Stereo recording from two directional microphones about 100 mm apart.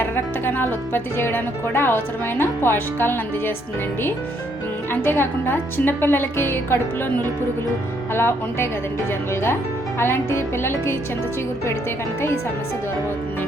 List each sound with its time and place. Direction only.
0.0 s speech: 20° left (ahead or behind)
4.9 s speech: 20° left (ahead or behind)
8.1 s speech: 25° left (ahead or behind)